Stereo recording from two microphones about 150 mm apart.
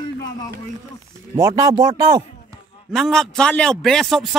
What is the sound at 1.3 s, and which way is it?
Speech, 20° right (ahead or behind).